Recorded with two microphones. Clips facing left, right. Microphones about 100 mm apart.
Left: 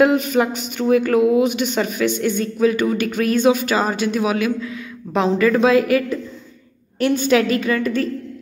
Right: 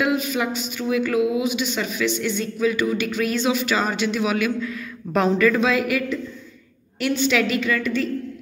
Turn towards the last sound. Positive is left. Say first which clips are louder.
# left 3 dB
turn(degrees=35)  # may be behind; listen again after turning